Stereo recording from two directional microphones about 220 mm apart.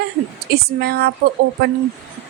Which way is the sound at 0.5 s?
45° right (ahead or behind).